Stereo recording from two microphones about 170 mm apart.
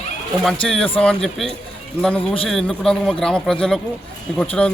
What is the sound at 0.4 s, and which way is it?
A man's voice, 5° left (ahead or behind).